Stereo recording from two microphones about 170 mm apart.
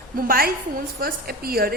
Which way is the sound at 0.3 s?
60° right (ahead or behind).